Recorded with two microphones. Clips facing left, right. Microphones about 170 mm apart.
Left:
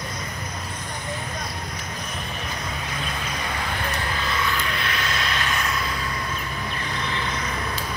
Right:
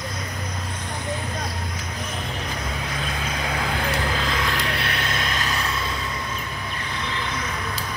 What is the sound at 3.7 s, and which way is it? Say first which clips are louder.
Vehicle: right 3 dB; 90° right.